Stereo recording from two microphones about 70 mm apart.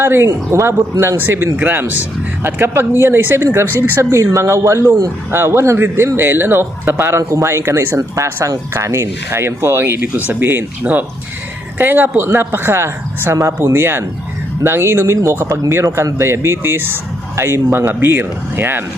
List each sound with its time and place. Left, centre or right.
0.0 s speech: right